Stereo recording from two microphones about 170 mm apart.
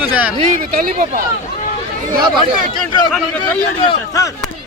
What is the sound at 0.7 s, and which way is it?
Speech, 60° right (ahead or behind).